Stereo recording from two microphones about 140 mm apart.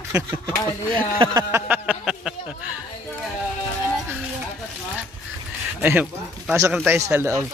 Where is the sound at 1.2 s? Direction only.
35° right (ahead or behind).